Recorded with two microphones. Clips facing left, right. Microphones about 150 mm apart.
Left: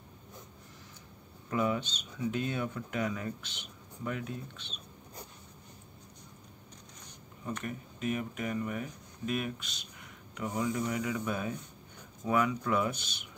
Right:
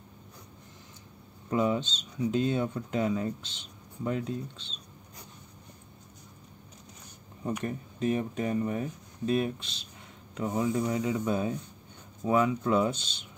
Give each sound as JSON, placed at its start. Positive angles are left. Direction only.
{"t": 1.5, "sound": "speech", "side_deg": -25}
{"t": 7.6, "sound": "speech", "side_deg": -30}